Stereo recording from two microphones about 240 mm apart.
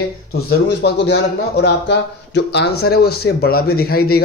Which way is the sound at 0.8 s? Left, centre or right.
Left.